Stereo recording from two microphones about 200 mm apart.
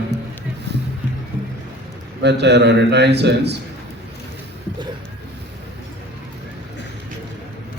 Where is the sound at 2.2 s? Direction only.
60° right (ahead or behind).